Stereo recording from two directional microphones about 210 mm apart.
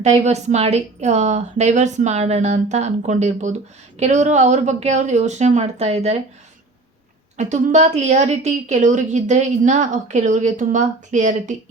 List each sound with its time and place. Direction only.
0.0 s a woman's voice: 35° right (ahead or behind)
7.3 s a woman's voice: 35° right (ahead or behind)